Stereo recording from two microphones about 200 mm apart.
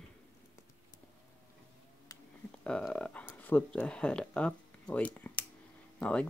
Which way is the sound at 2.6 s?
5° left (ahead or behind).